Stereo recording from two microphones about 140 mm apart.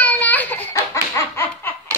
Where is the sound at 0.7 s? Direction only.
20° left (ahead or behind).